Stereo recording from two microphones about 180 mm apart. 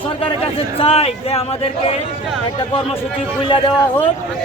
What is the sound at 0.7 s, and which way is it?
Speech, 35° left (ahead or behind).